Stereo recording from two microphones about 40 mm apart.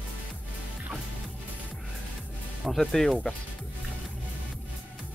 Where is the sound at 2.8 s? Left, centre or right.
Centre.